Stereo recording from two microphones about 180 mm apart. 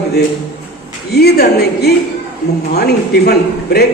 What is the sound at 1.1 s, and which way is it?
A man's voice, 60° left (ahead or behind).